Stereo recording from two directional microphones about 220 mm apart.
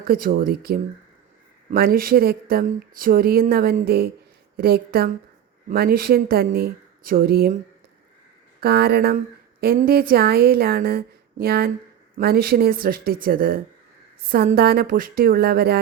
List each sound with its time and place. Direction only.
0.1 s speech: 40° right (ahead or behind)
8.6 s speech: 45° right (ahead or behind)